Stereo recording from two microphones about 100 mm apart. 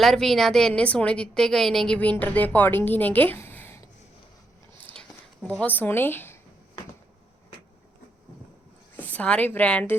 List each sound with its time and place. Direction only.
0.0 s a woman's voice: 5° left (ahead or behind)
2.0 s a woman's voice: 15° left (ahead or behind)
4.9 s a sound: 10° left (ahead or behind)
5.7 s speech: 20° left (ahead or behind)
9.0 s a woman's voice: 15° left (ahead or behind)